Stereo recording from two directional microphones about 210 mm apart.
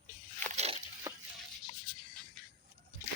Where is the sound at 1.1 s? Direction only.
15° right (ahead or behind).